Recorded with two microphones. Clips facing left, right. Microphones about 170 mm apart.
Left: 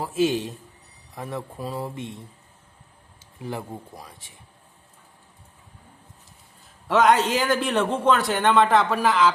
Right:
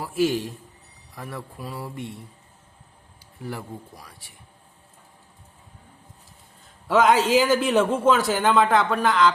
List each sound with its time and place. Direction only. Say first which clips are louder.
0.0 s speech: even; 20° left (ahead or behind)
3.4 s speech: left 2 dB; 20° left (ahead or behind)
6.8 s a man's voice: even; centre (ahead or behind)